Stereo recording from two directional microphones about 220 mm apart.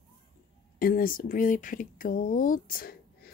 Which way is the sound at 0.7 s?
40° left (ahead or behind).